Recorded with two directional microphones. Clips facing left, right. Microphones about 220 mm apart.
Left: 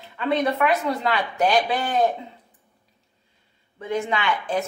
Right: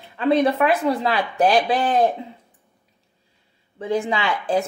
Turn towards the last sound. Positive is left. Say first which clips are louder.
# right 3 dB
turn(degrees=-30)  # may be behind; listen again after turning